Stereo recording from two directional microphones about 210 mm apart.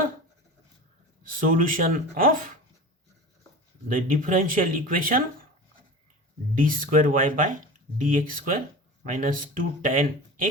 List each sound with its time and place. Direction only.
1.2 s speech: 40° right (ahead or behind)
3.8 s speech: 40° right (ahead or behind)
6.5 s speech: 40° right (ahead or behind)